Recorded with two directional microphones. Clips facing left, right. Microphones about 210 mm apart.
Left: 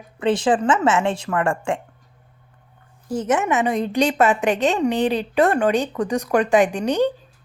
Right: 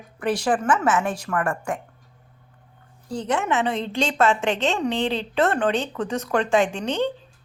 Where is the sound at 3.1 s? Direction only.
20° left (ahead or behind).